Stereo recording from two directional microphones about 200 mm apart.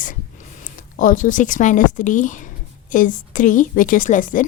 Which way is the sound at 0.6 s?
45° left (ahead or behind).